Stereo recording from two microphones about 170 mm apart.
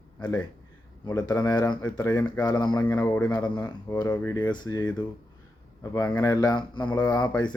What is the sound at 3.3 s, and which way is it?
Speech, 25° left (ahead or behind).